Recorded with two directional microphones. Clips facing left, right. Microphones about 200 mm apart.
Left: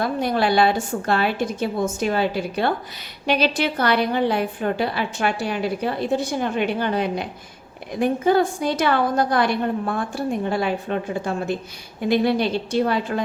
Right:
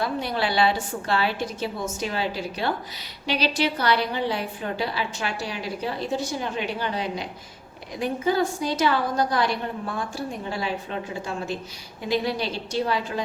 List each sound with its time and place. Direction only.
0.0 s a woman's voice: 50° left (ahead or behind)